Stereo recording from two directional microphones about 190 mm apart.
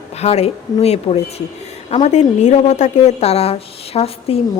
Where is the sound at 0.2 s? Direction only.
35° left (ahead or behind).